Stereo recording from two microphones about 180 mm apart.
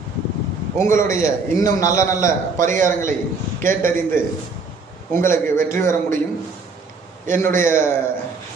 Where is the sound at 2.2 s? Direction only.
45° right (ahead or behind).